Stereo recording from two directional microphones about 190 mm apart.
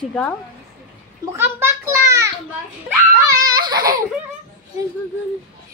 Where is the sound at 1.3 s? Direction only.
15° right (ahead or behind).